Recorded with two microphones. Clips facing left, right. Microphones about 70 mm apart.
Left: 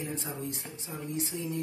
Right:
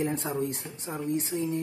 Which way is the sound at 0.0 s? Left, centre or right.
Right.